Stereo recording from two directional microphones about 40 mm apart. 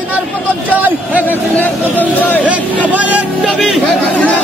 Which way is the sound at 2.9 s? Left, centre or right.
Right.